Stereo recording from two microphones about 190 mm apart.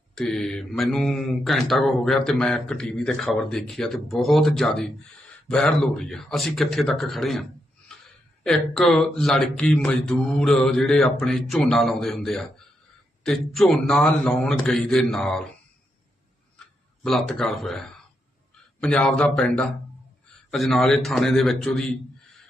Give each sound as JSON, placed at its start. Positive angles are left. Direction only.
{"t": 0.2, "sound": "speech", "side_deg": 5}
{"t": 7.9, "sound": "a sound", "side_deg": 5}
{"t": 8.4, "sound": "speech", "side_deg": 0}
{"t": 17.0, "sound": "speech", "side_deg": 0}